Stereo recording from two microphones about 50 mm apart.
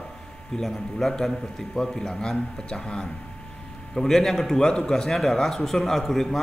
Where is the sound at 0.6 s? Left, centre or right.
Centre.